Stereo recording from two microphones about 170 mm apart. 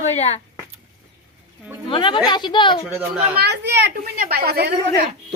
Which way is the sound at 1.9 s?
30° left (ahead or behind).